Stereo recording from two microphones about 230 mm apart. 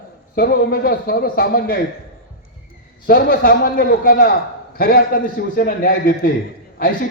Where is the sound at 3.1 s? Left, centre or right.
Left.